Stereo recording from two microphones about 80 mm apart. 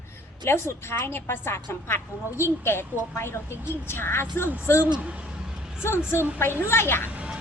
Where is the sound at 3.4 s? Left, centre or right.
Right.